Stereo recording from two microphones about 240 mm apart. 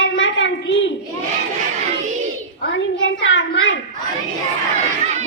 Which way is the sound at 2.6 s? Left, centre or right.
Left.